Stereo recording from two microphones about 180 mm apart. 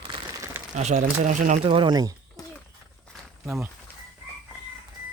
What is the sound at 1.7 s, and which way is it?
Speech, 25° right (ahead or behind).